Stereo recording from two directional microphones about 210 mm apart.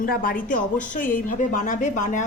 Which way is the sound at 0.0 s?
45° left (ahead or behind).